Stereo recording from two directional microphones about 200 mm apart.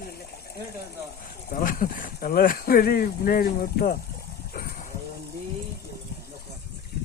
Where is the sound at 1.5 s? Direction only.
45° left (ahead or behind).